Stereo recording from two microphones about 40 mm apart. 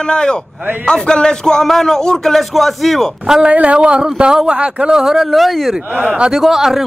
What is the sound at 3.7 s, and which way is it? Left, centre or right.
Speech, right.